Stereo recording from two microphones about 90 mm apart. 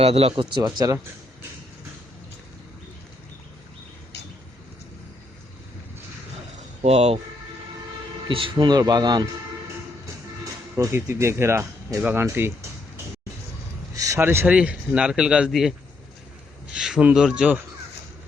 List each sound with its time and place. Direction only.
0.2 s speech: 80° right; by 0.9 s 50° right (ahead or behind)
8.3 s a man's voice: 75° right (ahead or behind); by 9.2 s 50° right (ahead or behind)
10.8 s speech: 30° right (ahead or behind)
13.9 s a sound: 40° right (ahead or behind)
14.2 s speech: 25° right (ahead or behind)
14.5 s speech: 10° right (ahead or behind)
16.7 s speech: 5° right (ahead or behind)
17.0 s speech: 15° right (ahead or behind)